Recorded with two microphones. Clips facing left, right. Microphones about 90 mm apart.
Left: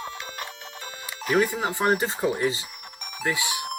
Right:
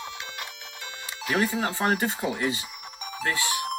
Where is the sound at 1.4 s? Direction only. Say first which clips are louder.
Left 1 dB; 15° left (ahead or behind).